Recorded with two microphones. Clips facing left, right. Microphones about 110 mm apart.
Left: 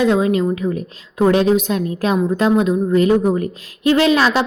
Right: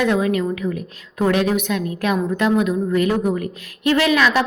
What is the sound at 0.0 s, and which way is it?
A woman's voice, 25° left (ahead or behind).